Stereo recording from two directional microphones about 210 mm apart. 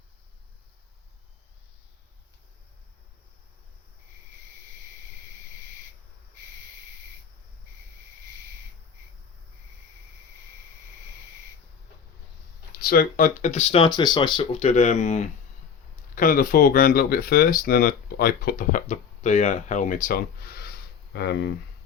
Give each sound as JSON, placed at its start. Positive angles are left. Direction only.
{"t": 12.8, "sound": "speech", "side_deg": 45}